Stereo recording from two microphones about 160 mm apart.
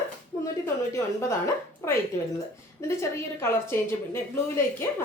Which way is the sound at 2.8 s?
15° left (ahead or behind).